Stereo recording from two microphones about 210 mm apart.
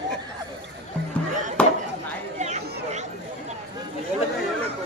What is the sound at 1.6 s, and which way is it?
Chop, 5° left (ahead or behind).